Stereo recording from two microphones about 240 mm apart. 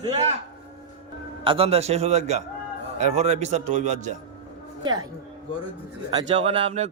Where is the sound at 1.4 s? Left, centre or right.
Right.